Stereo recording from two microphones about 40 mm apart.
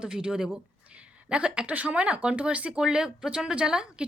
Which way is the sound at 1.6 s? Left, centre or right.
Right.